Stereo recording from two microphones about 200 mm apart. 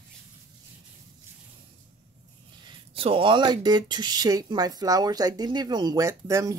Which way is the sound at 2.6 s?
25° right (ahead or behind).